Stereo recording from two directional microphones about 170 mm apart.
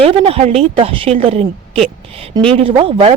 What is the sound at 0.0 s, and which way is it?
A woman's voice, 35° right (ahead or behind).